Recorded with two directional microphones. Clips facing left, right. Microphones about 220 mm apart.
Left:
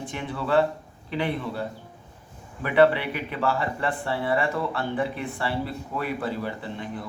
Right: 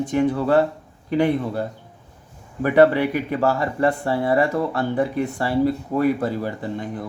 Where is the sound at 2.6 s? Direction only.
45° right (ahead or behind).